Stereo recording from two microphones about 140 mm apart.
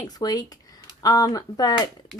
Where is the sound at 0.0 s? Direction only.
30° left (ahead or behind).